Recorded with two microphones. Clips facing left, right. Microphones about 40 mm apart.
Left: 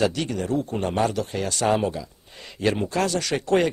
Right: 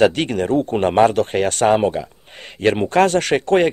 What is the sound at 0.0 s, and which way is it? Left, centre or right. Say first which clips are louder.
Speech: right 8 dB; right.